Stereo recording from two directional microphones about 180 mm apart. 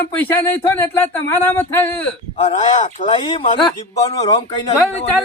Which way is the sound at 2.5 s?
40° left (ahead or behind).